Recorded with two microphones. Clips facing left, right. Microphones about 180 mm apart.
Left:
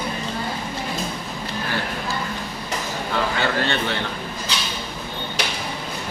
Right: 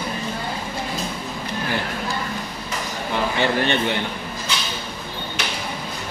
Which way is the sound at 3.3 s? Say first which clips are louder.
Right 2 dB; 20° right (ahead or behind).